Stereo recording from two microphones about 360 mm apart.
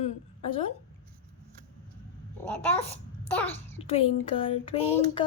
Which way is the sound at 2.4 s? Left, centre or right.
Centre.